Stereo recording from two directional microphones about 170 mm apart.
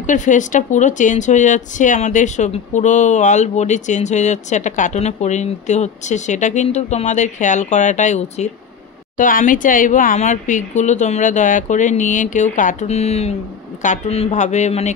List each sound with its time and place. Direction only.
0.0 s speech: 45° left (ahead or behind)